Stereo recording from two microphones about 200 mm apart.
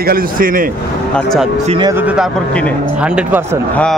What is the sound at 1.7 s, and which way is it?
Speech, 20° right (ahead or behind).